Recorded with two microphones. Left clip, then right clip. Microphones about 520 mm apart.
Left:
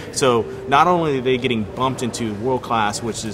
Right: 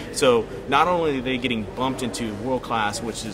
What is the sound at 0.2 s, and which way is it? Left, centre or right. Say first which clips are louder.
A man's voice: left 1 dB; left.